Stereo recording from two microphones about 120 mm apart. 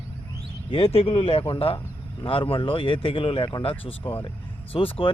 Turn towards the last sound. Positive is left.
turn(degrees=50)  # may be behind; listen again after turning